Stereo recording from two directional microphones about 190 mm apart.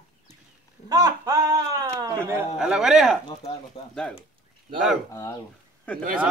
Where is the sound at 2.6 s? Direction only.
Centre (ahead or behind).